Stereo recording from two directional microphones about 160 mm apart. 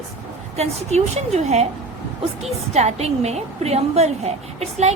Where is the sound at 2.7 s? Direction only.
45° right (ahead or behind).